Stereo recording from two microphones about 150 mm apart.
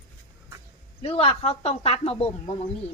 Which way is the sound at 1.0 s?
35° left (ahead or behind).